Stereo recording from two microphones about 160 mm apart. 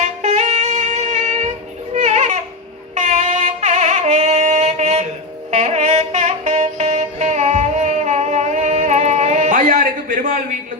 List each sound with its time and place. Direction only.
0.2 s saxophone: 45° right (ahead or behind)
1.9 s a sound: 45° right (ahead or behind)
2.9 s music: 45° right (ahead or behind)